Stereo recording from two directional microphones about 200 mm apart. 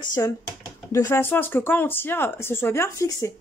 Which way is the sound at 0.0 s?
20° left (ahead or behind).